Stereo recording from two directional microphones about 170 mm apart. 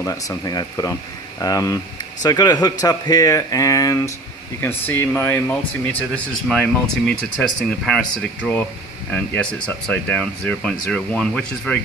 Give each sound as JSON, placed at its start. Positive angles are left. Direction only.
{"t": 0.0, "sound": "speech", "side_deg": 15}
{"t": 9.4, "sound": "speech", "side_deg": 5}